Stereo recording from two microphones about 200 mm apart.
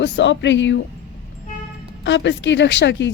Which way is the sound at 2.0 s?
65° left (ahead or behind).